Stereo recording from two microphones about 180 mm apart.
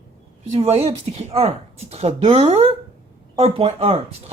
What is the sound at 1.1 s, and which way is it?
Speech, 35° right (ahead or behind).